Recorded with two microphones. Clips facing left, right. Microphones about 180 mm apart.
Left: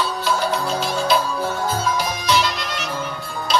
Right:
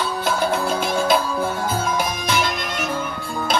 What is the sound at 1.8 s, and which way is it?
Music, 50° right (ahead or behind).